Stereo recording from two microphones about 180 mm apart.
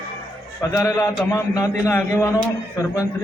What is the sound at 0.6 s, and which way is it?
A man's voice, 15° left (ahead or behind).